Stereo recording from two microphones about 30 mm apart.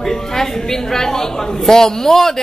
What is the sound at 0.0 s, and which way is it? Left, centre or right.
A man's voice, centre.